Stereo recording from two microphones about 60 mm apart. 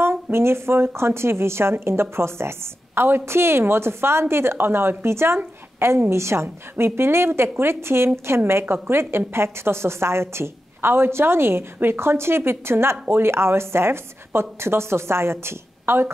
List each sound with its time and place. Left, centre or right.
0.0 s speech: right